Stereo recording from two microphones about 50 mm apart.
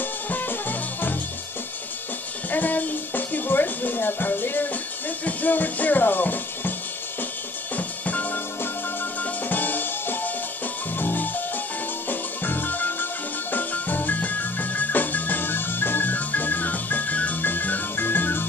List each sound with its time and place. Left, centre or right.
0.0 s music: left
2.5 s music: left
5.2 s speech: left
7.7 s music: left